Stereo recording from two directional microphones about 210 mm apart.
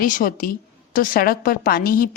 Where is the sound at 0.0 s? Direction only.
40° left (ahead or behind).